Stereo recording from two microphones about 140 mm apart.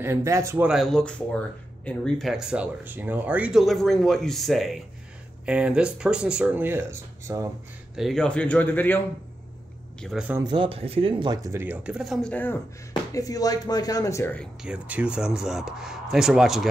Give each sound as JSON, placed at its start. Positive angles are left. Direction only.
{"t": 0.0, "sound": "speech", "side_deg": -20}
{"t": 0.7, "sound": "speech", "side_deg": 0}
{"t": 7.9, "sound": "speech", "side_deg": 0}
{"t": 9.9, "sound": "speech", "side_deg": 5}
{"t": 10.4, "sound": "speech", "side_deg": -35}
{"t": 11.5, "sound": "speech", "side_deg": -10}
{"t": 13.1, "sound": "speech", "side_deg": 25}
{"t": 14.6, "sound": "speech", "side_deg": -10}